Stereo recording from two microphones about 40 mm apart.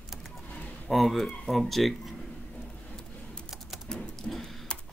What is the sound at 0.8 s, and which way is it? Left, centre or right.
Speech, centre.